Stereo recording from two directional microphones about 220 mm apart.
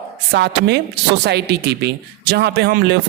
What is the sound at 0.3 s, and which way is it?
Speech, 50° right (ahead or behind).